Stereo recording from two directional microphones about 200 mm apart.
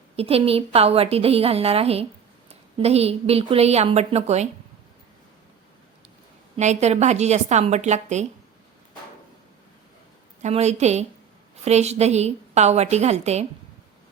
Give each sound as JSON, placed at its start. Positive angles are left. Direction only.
{"t": 0.2, "sound": "a woman's voice", "side_deg": -30}
{"t": 6.6, "sound": "a woman's voice", "side_deg": -35}
{"t": 10.4, "sound": "a woman's voice", "side_deg": -35}